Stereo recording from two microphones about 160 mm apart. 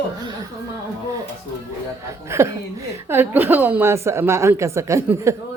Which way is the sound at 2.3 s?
15° right (ahead or behind).